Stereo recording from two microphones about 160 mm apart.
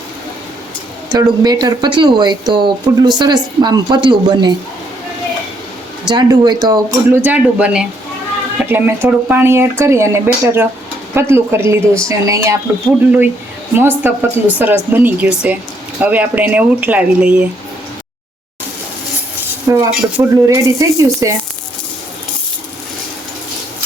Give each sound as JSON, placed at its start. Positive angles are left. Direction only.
{"t": 1.1, "sound": "speech", "side_deg": -25}
{"t": 6.1, "sound": "speech", "side_deg": -25}
{"t": 7.2, "sound": "speech", "side_deg": -10}
{"t": 19.6, "sound": "speech", "side_deg": -20}